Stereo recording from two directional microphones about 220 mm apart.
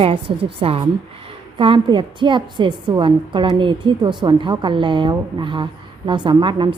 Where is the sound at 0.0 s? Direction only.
25° right (ahead or behind).